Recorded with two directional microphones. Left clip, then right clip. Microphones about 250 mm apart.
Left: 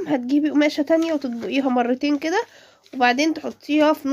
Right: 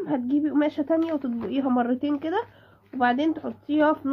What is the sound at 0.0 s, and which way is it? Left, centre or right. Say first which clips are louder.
Speech: left 4 dB; left.